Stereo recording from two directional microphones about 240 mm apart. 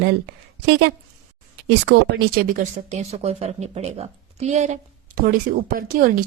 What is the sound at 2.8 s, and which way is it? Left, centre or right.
A woman's voice, right.